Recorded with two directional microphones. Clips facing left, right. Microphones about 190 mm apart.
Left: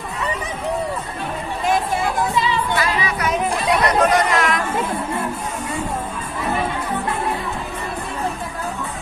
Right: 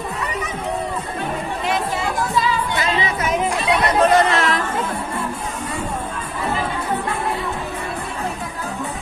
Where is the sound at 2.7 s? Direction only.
25° right (ahead or behind).